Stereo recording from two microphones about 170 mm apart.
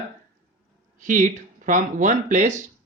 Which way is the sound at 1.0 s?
50° right (ahead or behind).